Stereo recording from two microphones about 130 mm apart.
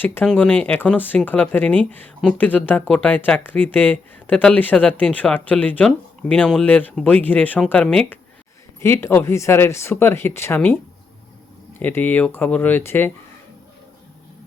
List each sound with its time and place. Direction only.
0.0 s speech: 15° left (ahead or behind)
11.8 s speech: 15° left (ahead or behind)